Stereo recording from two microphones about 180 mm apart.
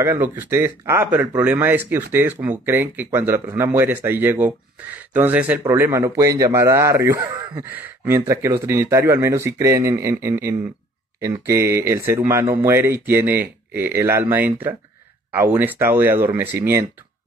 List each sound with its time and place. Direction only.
0.0 s speech: 15° right (ahead or behind)